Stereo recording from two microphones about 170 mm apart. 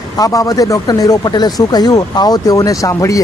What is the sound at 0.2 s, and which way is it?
Speech, 20° left (ahead or behind).